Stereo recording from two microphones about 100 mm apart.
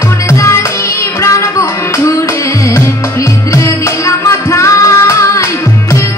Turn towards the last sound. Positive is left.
turn(degrees=30)  # may be behind; listen again after turning